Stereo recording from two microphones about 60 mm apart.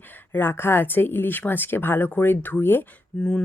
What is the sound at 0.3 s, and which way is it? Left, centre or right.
Speech, left.